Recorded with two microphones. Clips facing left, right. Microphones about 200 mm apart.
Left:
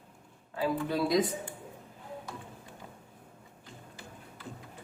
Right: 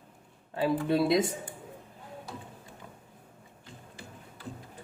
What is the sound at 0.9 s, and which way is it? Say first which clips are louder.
Speech: right 3 dB; 25° right (ahead or behind).